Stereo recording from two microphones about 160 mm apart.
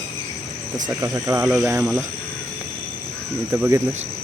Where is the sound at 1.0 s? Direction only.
20° right (ahead or behind).